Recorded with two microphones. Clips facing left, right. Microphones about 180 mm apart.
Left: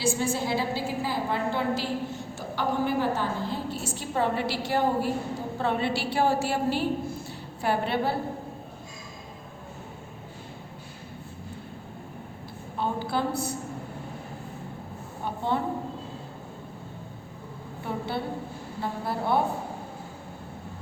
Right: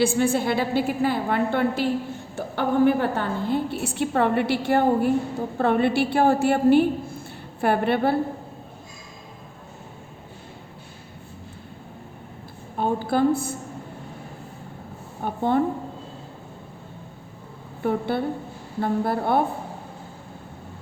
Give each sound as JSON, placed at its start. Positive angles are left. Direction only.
{"t": 0.0, "sound": "a woman's voice", "side_deg": -60}
{"t": 12.8, "sound": "a woman's voice", "side_deg": -50}
{"t": 15.2, "sound": "a sound", "side_deg": -55}
{"t": 17.8, "sound": "a woman's voice", "side_deg": -55}